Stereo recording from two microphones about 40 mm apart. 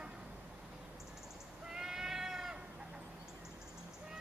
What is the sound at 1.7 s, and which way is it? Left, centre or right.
Goat, centre.